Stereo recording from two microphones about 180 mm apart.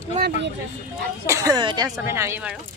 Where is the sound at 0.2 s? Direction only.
45° right (ahead or behind).